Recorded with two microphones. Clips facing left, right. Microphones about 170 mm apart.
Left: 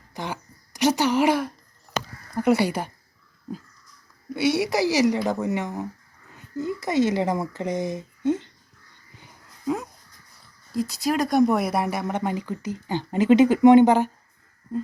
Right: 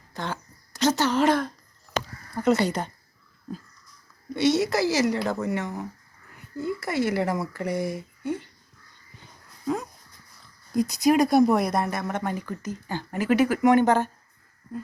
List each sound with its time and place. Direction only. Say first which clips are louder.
0.1 s a sound: even; 15° left (ahead or behind)
2.3 s speech: left 2 dB; 15° left (ahead or behind)
4.4 s speech: even; 10° left (ahead or behind)
9.1 s dog: left 1 dB; 15° left (ahead or behind)
10.8 s speech: right 4 dB; 15° right (ahead or behind); by 14.1 s 15° left (ahead or behind)